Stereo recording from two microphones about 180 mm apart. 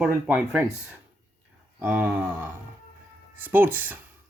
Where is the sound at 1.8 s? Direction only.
10° right (ahead or behind).